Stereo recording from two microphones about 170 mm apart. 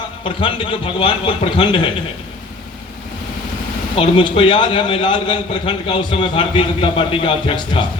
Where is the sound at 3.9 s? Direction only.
30° left (ahead or behind).